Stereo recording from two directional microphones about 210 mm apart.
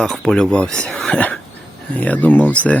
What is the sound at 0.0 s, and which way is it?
Speech, centre (ahead or behind).